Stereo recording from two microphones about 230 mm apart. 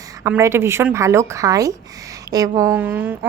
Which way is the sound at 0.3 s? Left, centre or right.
Centre.